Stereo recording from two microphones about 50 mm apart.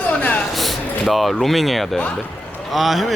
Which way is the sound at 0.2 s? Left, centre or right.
Left.